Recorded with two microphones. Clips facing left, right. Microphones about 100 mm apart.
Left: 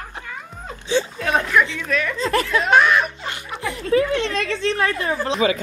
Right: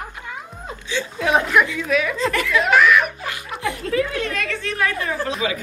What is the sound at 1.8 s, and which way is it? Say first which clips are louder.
Speech: right 3 dB; 5° right (ahead or behind).